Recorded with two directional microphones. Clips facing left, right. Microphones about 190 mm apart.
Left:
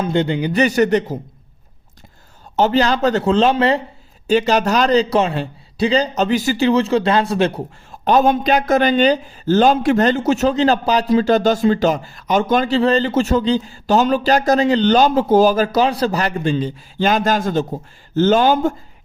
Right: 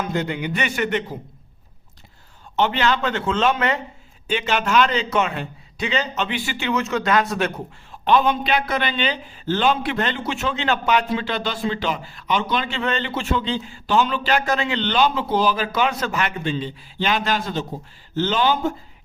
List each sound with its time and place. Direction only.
0.0 s a man's voice: 30° left (ahead or behind)
2.6 s a man's voice: 40° left (ahead or behind)
7.9 s speech: 45° left (ahead or behind)